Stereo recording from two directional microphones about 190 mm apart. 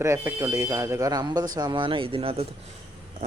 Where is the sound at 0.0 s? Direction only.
15° right (ahead or behind).